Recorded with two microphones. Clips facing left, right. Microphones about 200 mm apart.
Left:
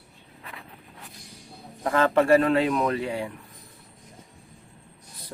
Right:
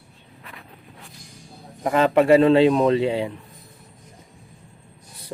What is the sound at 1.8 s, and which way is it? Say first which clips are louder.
Speech: right 3 dB; 15° right (ahead or behind).